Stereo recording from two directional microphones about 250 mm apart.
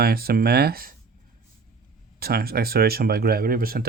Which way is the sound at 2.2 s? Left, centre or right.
Right.